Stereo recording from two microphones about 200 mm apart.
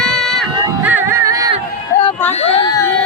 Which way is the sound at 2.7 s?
15° left (ahead or behind).